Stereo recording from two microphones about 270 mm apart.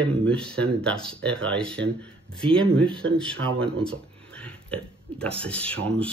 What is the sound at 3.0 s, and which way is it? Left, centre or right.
Speech, right.